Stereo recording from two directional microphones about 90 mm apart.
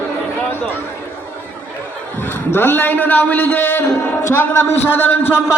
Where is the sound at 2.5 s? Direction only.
25° left (ahead or behind).